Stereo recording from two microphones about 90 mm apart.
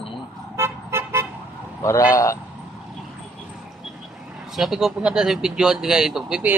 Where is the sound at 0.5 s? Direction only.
30° right (ahead or behind).